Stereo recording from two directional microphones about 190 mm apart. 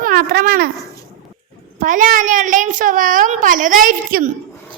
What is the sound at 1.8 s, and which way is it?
A child's voice, 45° right (ahead or behind).